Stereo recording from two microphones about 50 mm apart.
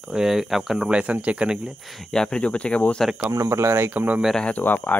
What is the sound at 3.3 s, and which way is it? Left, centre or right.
Speech, right.